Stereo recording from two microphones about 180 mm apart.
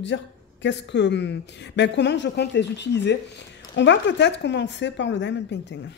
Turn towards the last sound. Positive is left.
turn(degrees=75)  # may be behind; listen again after turning